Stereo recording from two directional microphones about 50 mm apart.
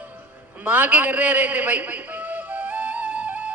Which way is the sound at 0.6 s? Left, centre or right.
Right.